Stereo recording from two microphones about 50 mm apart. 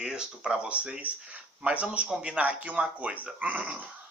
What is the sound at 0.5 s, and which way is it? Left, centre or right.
Speech, right.